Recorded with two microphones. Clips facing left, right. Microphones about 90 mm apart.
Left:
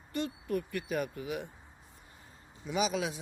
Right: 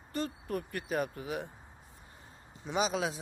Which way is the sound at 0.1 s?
40° right (ahead or behind).